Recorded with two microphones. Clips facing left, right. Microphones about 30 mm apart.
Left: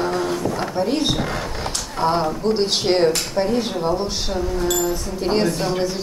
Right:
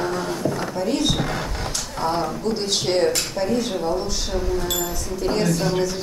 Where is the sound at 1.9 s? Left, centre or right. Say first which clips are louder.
Left 4 dB; left.